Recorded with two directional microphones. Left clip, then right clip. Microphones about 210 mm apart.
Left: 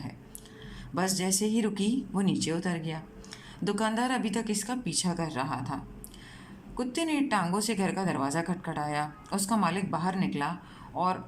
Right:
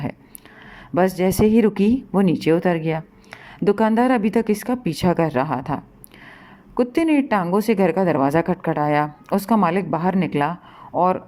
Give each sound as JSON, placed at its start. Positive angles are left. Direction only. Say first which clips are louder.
{"t": 0.9, "sound": "speech", "louder": "right 12 dB", "side_deg": -35}